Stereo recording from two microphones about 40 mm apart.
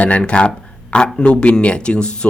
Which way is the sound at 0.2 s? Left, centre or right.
Left.